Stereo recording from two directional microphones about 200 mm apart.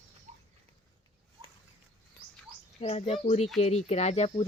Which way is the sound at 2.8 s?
30° left (ahead or behind).